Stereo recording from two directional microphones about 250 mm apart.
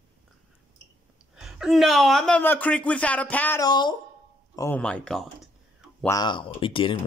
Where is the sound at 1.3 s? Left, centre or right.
Centre.